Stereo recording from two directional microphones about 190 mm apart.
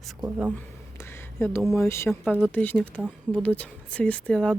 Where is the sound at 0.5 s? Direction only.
10° left (ahead or behind).